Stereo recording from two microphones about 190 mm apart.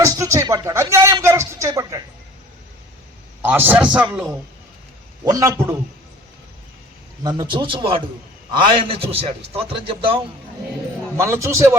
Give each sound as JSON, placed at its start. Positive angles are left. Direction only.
{"t": 0.0, "sound": "a sound", "side_deg": -15}
{"t": 3.4, "sound": "a man's voice", "side_deg": -10}
{"t": 7.2, "sound": "a man's voice", "side_deg": -20}
{"t": 11.2, "sound": "a man's voice", "side_deg": -15}